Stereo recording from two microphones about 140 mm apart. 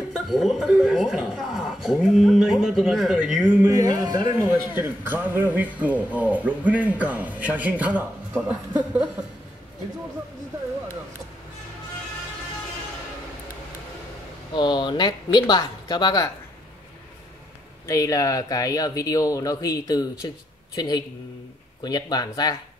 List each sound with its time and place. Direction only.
0.1 s speech: centre (ahead or behind)
3.6 s a man's voice: 25° right (ahead or behind)
4.7 s speech: 15° right (ahead or behind)
14.5 s speech: 30° left (ahead or behind)
17.8 s speech: 25° left (ahead or behind)